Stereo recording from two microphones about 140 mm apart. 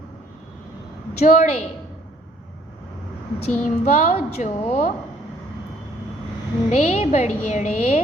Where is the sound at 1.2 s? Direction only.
60° left (ahead or behind).